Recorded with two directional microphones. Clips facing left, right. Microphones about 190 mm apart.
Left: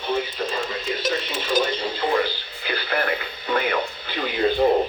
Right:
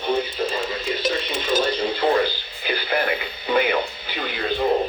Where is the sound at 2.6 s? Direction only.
20° right (ahead or behind).